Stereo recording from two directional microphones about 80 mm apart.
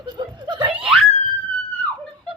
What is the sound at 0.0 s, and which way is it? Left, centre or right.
Snicker, right.